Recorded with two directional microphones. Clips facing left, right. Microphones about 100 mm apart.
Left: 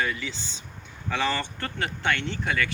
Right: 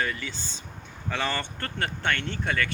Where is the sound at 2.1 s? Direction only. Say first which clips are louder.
Left 1 dB; 45° right (ahead or behind).